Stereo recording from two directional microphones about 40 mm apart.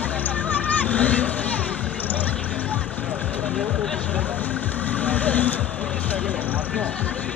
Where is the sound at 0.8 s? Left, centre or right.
Left.